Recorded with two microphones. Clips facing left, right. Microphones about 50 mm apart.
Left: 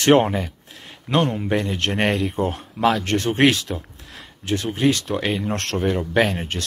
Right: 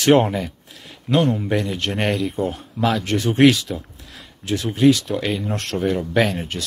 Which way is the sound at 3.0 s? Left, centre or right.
Left.